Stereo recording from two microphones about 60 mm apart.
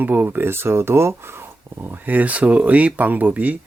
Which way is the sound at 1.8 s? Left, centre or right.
Right.